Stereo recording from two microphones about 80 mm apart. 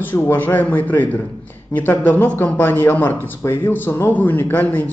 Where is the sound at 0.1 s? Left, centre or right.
Left.